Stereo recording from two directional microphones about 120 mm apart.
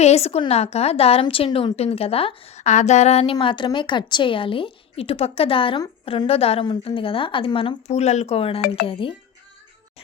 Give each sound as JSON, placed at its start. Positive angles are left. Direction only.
{"t": 0.0, "sound": "a woman's voice", "side_deg": 65}
{"t": 3.4, "sound": "a woman's voice", "side_deg": 40}
{"t": 7.9, "sound": "a woman's voice", "side_deg": 65}